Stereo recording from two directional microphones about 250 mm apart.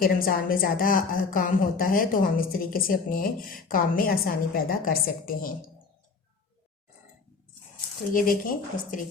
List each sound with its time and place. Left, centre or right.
0.0 s a woman's voice: left
8.1 s a woman's voice: left